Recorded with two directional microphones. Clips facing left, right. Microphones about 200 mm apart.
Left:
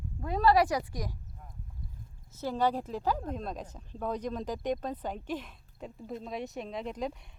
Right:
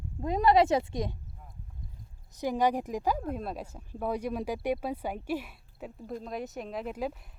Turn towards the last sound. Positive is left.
turn(degrees=-5)  # may be behind; listen again after turning